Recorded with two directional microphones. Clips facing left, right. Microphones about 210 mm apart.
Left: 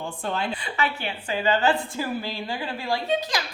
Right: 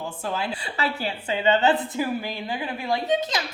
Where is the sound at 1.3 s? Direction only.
20° right (ahead or behind).